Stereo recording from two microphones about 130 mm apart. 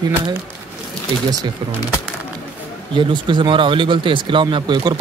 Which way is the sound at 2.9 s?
40° right (ahead or behind).